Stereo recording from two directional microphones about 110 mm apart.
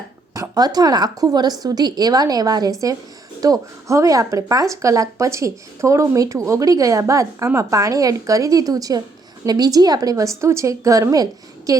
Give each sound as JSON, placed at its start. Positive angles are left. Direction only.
{"t": 0.3, "sound": "speech", "side_deg": -35}